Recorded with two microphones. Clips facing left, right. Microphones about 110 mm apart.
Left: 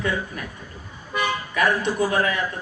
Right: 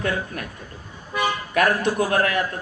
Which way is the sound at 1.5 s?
60° right (ahead or behind).